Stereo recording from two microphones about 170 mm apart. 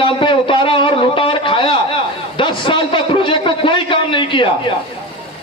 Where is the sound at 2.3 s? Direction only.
30° left (ahead or behind).